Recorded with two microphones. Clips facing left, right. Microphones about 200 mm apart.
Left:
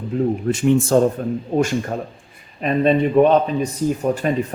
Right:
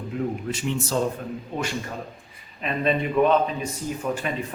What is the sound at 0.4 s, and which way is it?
Speech, 50° left (ahead or behind).